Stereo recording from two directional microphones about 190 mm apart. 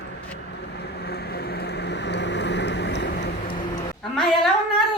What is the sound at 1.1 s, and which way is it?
Vehicle, 55° left (ahead or behind).